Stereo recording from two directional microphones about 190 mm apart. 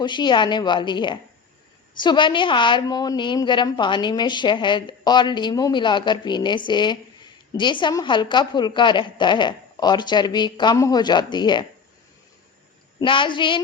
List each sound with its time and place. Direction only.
0.0 s a woman's voice: 25° left (ahead or behind)
13.0 s a woman's voice: 25° left (ahead or behind)